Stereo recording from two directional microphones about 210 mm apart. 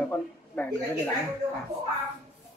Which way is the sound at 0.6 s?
5° left (ahead or behind).